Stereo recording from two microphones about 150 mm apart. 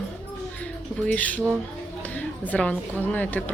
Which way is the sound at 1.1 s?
10° left (ahead or behind).